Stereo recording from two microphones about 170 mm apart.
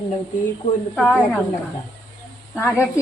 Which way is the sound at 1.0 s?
10° left (ahead or behind).